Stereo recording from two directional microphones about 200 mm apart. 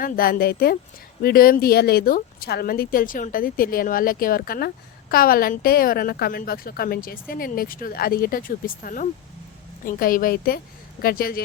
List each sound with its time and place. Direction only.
0.0 s a woman's voice: 45° left (ahead or behind)